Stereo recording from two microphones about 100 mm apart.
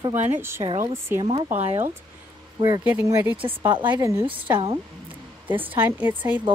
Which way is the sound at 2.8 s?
15° right (ahead or behind).